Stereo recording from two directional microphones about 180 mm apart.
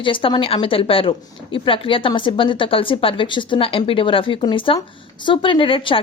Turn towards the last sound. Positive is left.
turn(degrees=30)  # may be behind; listen again after turning